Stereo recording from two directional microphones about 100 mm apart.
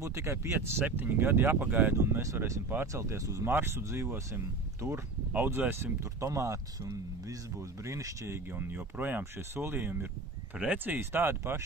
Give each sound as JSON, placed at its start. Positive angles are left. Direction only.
{"t": 0.0, "sound": "speech", "side_deg": -30}
{"t": 5.3, "sound": "speech", "side_deg": -20}
{"t": 8.7, "sound": "speech", "side_deg": -15}